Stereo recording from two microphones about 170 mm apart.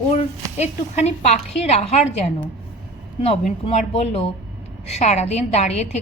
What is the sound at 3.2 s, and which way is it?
A woman's voice, 35° left (ahead or behind).